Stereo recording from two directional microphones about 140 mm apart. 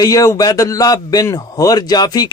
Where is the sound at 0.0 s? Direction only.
25° left (ahead or behind).